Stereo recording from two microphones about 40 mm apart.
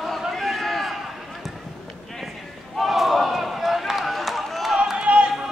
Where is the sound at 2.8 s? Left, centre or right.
Centre.